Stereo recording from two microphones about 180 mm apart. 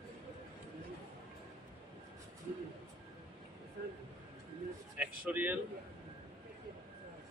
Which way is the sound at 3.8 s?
60° right (ahead or behind).